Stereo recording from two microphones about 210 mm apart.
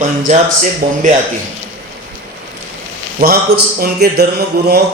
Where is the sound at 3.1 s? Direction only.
45° right (ahead or behind).